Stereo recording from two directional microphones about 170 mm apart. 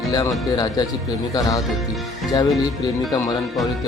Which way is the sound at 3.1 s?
20° left (ahead or behind).